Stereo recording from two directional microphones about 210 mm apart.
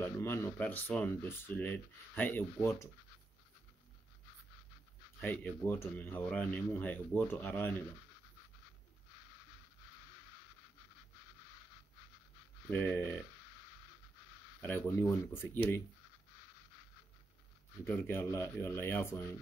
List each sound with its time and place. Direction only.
0.0 s speech: 10° left (ahead or behind)
5.2 s speech: 10° left (ahead or behind)
12.6 s speech: 10° left (ahead or behind)
14.6 s speech: 10° left (ahead or behind)
17.8 s speech: 10° left (ahead or behind)